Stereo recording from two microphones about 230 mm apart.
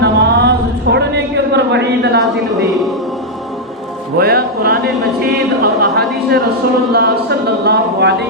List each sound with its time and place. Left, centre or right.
0.0 s a sound: right
4.2 s music: right
5.2 s speech: right